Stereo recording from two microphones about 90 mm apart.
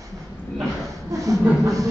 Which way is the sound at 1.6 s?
35° right (ahead or behind).